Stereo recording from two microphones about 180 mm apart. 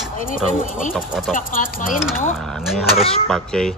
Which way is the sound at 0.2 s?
50° left (ahead or behind).